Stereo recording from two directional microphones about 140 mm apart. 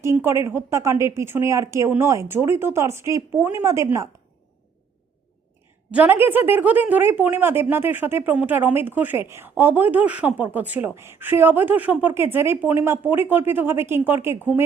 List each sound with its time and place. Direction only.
0.0 s speech: 20° right (ahead or behind)
5.9 s speech: 15° right (ahead or behind)